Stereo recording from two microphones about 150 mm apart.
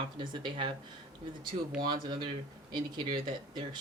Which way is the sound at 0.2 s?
30° right (ahead or behind).